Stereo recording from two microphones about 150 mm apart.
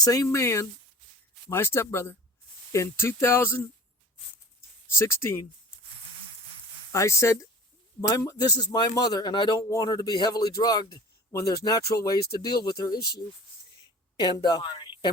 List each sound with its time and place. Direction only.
0.0 s speech: 25° left (ahead or behind)
4.9 s speech: 20° left (ahead or behind)
6.9 s a woman's voice: 20° left (ahead or behind)